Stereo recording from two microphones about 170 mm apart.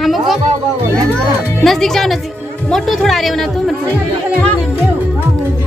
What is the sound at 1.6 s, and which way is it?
A woman's voice, centre (ahead or behind).